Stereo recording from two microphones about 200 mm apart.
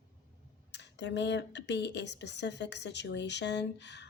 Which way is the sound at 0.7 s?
60° left (ahead or behind).